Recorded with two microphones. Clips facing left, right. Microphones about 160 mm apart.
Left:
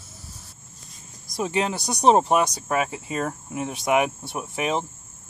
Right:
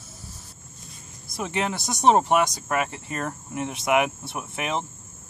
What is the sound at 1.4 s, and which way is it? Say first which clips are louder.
Speech: left 3 dB; 25° left (ahead or behind).